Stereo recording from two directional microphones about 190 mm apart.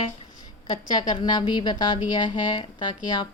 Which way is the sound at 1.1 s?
20° left (ahead or behind).